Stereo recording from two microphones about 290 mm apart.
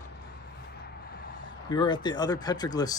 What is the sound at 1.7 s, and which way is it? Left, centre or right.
Speech, centre.